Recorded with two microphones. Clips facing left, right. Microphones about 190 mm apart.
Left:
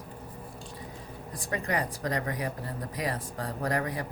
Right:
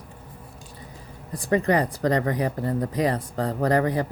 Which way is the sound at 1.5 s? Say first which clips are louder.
Right 10 dB; 65° right (ahead or behind).